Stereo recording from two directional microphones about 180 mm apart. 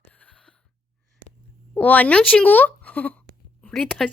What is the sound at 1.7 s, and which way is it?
Speech, 10° left (ahead or behind).